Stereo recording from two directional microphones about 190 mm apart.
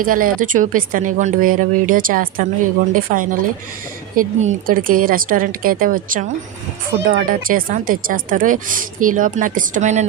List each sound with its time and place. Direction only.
0.0 s speech: 45° right (ahead or behind)
6.9 s speech: 55° right (ahead or behind); by 10.1 s 40° right (ahead or behind)